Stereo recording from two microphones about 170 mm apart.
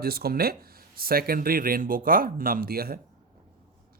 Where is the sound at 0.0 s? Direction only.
65° right (ahead or behind).